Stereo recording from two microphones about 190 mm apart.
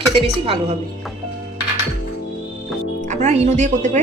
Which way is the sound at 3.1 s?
35° right (ahead or behind).